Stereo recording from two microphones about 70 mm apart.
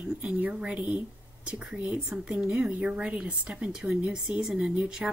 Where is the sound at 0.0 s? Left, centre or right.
Centre.